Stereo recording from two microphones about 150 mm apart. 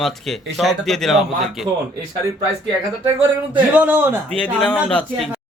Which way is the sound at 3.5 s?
10° right (ahead or behind).